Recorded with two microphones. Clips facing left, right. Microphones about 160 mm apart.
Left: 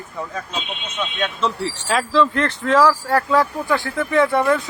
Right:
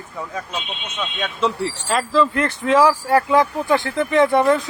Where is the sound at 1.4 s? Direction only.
Centre (ahead or behind).